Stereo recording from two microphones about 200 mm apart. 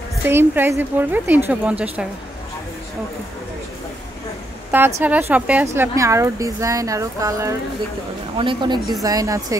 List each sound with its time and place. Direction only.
0.2 s a woman's voice: 10° right (ahead or behind)
4.6 s a woman's voice: 10° right (ahead or behind)